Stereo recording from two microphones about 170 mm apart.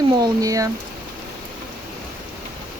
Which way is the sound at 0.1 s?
20° right (ahead or behind).